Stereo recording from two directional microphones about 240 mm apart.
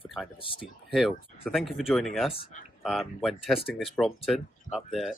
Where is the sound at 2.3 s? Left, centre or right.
Left.